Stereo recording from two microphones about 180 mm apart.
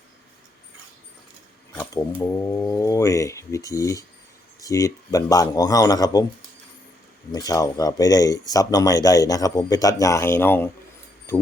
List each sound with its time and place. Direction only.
1.7 s speech: 15° left (ahead or behind)
7.3 s speech: 20° left (ahead or behind)